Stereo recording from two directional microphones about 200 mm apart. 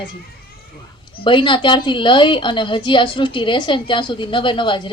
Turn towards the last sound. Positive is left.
turn(degrees=25)  # may be behind; listen again after turning